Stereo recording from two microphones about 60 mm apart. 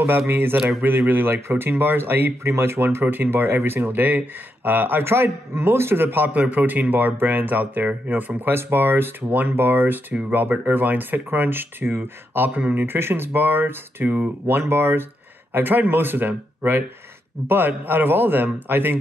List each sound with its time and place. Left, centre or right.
0.3 s a man's voice: right